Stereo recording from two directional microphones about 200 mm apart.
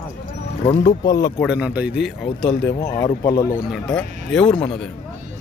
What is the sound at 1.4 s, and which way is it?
Speech, 5° right (ahead or behind).